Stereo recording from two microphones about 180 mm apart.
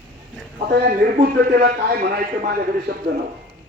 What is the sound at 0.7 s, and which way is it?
A man's voice, 55° right (ahead or behind).